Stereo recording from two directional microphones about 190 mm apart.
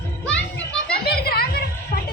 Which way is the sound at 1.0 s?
55° left (ahead or behind).